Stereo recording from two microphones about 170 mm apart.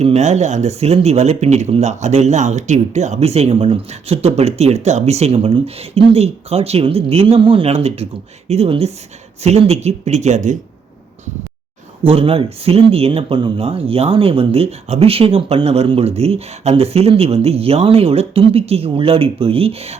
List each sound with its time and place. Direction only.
0.0 s speech: 40° right (ahead or behind)
12.0 s speech: 35° right (ahead or behind)